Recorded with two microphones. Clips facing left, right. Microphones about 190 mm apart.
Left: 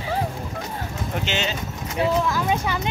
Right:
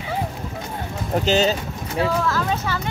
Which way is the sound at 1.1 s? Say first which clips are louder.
Right 9 dB; 40° right (ahead or behind).